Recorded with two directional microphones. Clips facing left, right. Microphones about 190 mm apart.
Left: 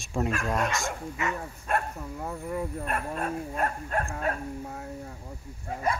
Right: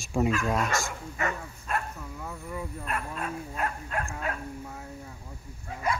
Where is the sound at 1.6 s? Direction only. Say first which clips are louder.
Left 3 dB; 45° left (ahead or behind).